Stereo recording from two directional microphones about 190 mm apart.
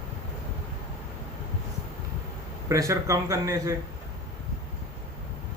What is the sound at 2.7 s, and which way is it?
A man's voice, 15° right (ahead or behind).